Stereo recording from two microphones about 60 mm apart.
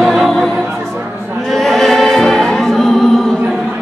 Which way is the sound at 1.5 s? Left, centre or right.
Centre.